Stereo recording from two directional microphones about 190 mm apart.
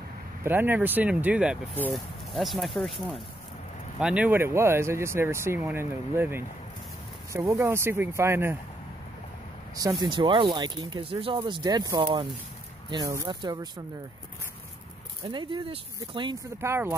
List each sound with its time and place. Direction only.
0.4 s speech: 10° right (ahead or behind)
9.8 s speech: 20° right (ahead or behind)
15.2 s speech: 25° right (ahead or behind)